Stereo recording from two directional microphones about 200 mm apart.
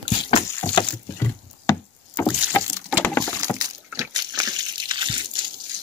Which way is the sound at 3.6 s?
15° right (ahead or behind).